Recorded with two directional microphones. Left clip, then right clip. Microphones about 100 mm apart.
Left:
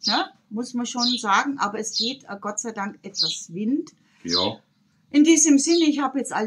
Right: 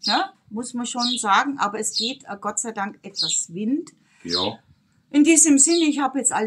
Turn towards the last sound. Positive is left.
turn(degrees=-40)  # may be behind; listen again after turning